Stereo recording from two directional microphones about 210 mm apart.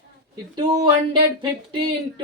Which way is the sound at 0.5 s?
20° right (ahead or behind).